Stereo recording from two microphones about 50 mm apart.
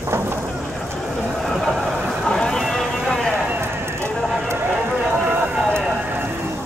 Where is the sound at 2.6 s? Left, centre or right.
Centre.